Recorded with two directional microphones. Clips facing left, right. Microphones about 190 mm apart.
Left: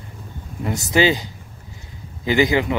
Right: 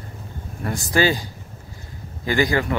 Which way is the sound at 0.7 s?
20° left (ahead or behind).